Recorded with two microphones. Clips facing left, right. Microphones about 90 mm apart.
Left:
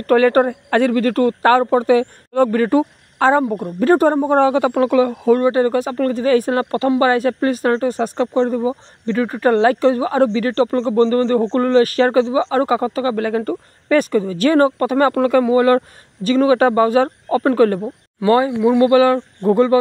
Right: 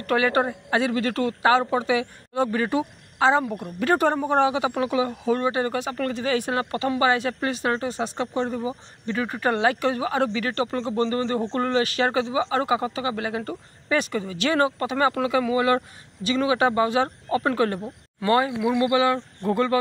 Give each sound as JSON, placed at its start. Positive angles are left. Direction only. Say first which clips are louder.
{"t": 0.0, "sound": "speech", "louder": "left 9 dB", "side_deg": 45}
{"t": 3.4, "sound": "speech", "louder": "left 8 dB", "side_deg": 35}
{"t": 18.2, "sound": "speech", "louder": "left 7 dB", "side_deg": 25}
{"t": 19.1, "sound": "speech", "louder": "left 9 dB", "side_deg": 25}